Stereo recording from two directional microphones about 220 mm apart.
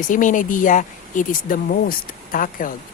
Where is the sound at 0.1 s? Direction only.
35° left (ahead or behind).